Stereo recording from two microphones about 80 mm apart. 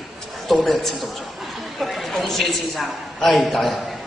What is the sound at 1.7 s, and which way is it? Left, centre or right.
A woman's voice, centre.